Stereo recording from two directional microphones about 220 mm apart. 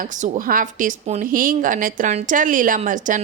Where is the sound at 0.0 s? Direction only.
40° right (ahead or behind).